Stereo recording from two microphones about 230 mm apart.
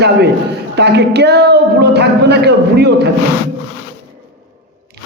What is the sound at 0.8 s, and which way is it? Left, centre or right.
A man's voice, right.